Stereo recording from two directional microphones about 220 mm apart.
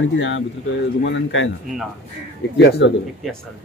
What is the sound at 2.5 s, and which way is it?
Speech, 50° left (ahead or behind).